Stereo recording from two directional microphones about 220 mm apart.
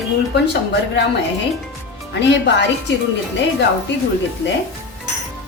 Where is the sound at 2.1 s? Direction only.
55° left (ahead or behind).